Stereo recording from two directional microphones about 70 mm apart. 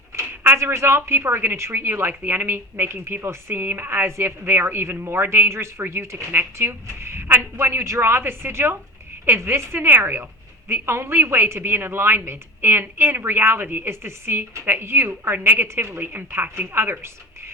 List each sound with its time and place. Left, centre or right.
0.1 s speech: right